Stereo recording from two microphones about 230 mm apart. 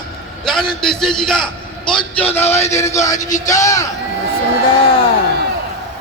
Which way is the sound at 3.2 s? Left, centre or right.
Left.